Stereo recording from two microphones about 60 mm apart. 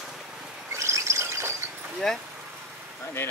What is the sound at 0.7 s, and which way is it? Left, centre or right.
Bird, right.